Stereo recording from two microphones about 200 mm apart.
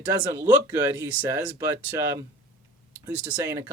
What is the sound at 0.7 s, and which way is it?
Speech, 10° right (ahead or behind).